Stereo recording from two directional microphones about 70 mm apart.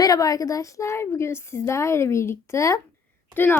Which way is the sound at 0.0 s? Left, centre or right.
Left.